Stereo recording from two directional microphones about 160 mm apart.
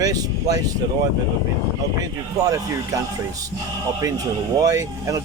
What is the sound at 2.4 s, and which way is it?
Speech, 20° right (ahead or behind).